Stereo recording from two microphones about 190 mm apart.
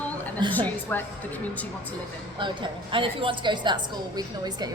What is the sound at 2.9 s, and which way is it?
A woman's voice, 25° right (ahead or behind).